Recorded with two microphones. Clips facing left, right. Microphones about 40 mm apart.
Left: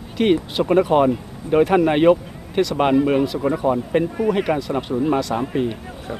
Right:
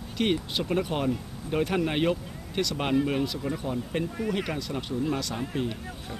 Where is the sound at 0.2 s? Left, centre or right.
Centre.